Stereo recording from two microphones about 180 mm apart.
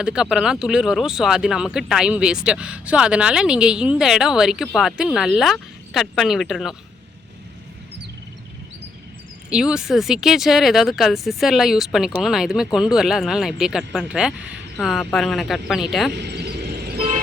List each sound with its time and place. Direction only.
0.0 s speech: 5° right (ahead or behind)
9.5 s speech: 5° right (ahead or behind)
16.1 s vehicle: 70° right (ahead or behind)